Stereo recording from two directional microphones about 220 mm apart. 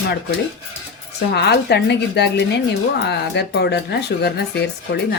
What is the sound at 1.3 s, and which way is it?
A woman's voice, 50° left (ahead or behind).